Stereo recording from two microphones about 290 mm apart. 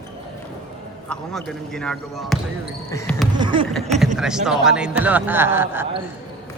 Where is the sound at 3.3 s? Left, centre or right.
Centre.